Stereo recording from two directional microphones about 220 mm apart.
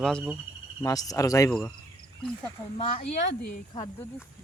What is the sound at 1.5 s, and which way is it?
Speech, 5° left (ahead or behind).